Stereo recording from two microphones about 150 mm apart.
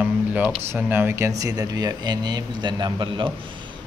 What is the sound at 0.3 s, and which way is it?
Speech, 10° right (ahead or behind).